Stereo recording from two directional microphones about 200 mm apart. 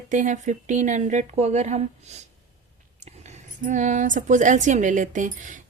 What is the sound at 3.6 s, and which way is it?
A woman's voice, 40° right (ahead or behind).